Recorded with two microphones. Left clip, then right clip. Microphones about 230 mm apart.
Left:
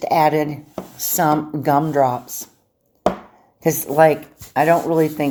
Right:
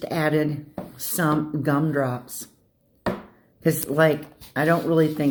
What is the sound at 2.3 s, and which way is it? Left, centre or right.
Speech, centre.